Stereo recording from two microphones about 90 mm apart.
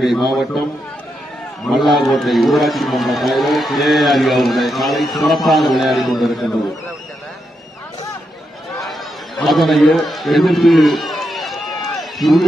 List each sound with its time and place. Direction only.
0.0 s a man's voice: centre (ahead or behind)
1.7 s a man's voice: centre (ahead or behind)
9.4 s a man's voice: centre (ahead or behind)